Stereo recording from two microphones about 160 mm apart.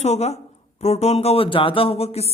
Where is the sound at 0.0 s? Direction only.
45° left (ahead or behind).